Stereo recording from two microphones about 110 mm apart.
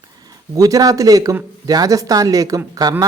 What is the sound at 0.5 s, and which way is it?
Speech, 35° right (ahead or behind).